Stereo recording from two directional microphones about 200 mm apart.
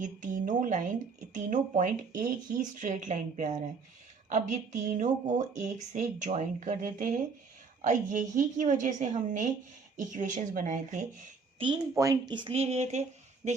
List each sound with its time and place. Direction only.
0.0 s speech: 40° right (ahead or behind)
11.6 s a woman's voice: 20° right (ahead or behind); by 13.6 s 35° right (ahead or behind)